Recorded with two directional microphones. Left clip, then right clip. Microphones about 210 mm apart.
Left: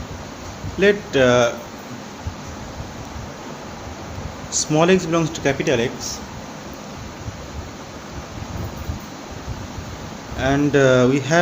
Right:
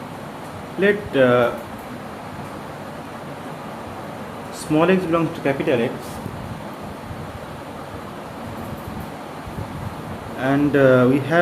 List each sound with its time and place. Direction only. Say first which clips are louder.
0.8 s speech: left 1 dB; 40° left (ahead or behind)
4.7 s speech: even; 35° left (ahead or behind)
10.4 s speech: even; 35° left (ahead or behind)